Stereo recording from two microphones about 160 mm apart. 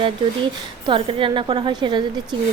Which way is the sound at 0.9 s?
30° right (ahead or behind).